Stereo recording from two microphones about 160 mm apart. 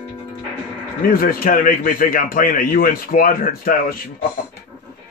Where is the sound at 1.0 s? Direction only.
65° left (ahead or behind).